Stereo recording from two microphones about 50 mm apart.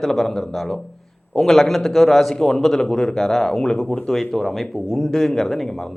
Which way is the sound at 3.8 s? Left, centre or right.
Left.